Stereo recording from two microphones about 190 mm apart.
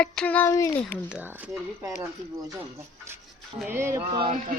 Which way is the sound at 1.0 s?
10° right (ahead or behind).